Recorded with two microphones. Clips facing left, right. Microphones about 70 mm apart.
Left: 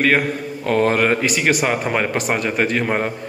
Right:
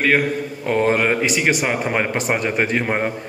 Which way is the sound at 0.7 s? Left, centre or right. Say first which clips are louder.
Left 1 dB; centre.